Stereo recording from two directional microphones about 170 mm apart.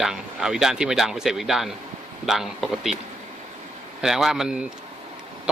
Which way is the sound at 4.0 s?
5° right (ahead or behind).